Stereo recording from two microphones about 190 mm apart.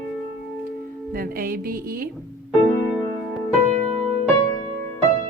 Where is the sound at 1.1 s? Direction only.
50° right (ahead or behind).